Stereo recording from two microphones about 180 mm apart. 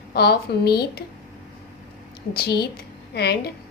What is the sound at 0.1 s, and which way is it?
Speech, 65° left (ahead or behind).